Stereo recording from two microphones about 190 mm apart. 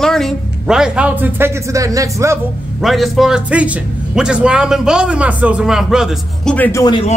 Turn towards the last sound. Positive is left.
turn(degrees=20)  # may be behind; listen again after turning